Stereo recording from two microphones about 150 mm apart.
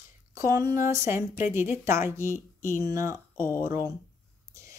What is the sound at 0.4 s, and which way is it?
Speech, 20° right (ahead or behind).